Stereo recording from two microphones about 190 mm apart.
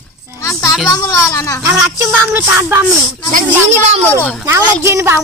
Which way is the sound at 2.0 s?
10° right (ahead or behind).